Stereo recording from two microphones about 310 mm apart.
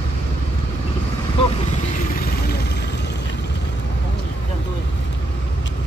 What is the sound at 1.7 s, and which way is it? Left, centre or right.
Vehicle, left.